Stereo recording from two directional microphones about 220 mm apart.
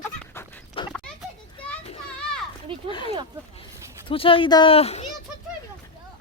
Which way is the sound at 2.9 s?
20° left (ahead or behind).